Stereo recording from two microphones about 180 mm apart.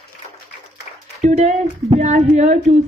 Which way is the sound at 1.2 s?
40° right (ahead or behind).